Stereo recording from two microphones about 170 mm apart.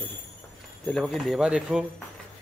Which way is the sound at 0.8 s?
Centre (ahead or behind).